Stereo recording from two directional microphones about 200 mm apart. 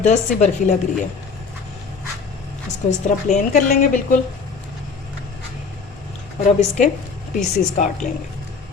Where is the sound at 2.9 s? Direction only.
35° left (ahead or behind).